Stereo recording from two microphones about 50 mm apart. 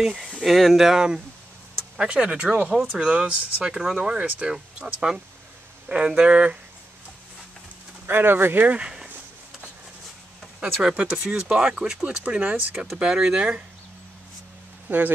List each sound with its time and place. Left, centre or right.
0.2 s speech: centre
2.0 s speech: right
5.9 s speech: right
8.1 s speech: right
8.6 s speech: right
10.6 s speech: centre
14.9 s speech: right